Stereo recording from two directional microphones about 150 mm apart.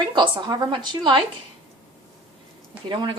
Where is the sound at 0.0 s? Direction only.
30° right (ahead or behind).